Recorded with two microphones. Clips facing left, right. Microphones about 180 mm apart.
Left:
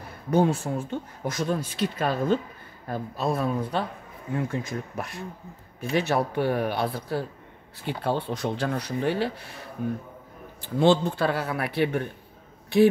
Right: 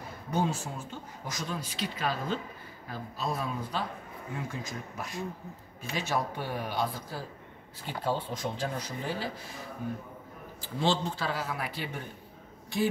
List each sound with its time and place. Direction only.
0.3 s speech: 60° left (ahead or behind)